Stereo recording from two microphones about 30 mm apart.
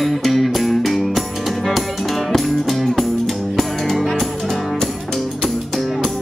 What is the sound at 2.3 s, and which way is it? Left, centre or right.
Music, centre.